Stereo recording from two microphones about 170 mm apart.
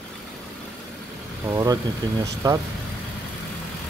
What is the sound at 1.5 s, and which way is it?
Speech, 20° right (ahead or behind).